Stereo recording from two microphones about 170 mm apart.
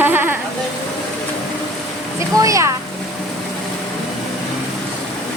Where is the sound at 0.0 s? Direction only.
10° right (ahead or behind).